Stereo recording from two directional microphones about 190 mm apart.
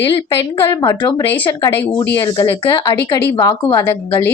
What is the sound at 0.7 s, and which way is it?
A woman's voice, 20° left (ahead or behind).